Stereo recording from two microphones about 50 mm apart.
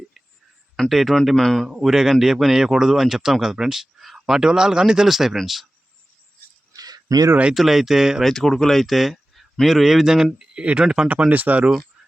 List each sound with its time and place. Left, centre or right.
0.9 s speech: centre
1.6 s speech: centre
7.5 s speech: centre
8.2 s speech: centre
10.5 s speech: right
11.3 s speech: right